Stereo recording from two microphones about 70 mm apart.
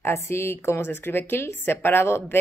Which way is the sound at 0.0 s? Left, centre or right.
Left.